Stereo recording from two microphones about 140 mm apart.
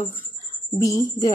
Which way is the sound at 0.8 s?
25° left (ahead or behind).